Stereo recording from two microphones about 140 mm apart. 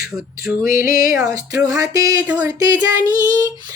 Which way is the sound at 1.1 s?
20° right (ahead or behind).